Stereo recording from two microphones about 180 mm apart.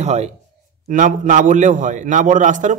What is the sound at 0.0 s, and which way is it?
A man's voice, 40° right (ahead or behind).